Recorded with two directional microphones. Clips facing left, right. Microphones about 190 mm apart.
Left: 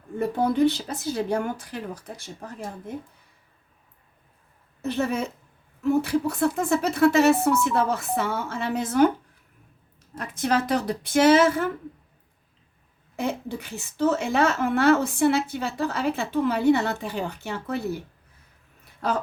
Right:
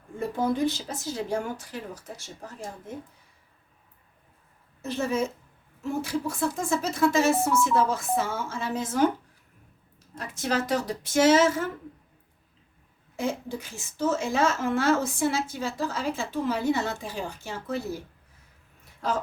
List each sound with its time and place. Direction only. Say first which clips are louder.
0.2 s a woman's voice: left 5 dB; 65° left (ahead or behind)
4.8 s a woman's voice: left 1 dB; 60° left (ahead or behind)
10.2 s a woman's voice: left 4 dB; 60° left (ahead or behind)
13.1 s a woman's voice: left 1 dB; 60° left (ahead or behind)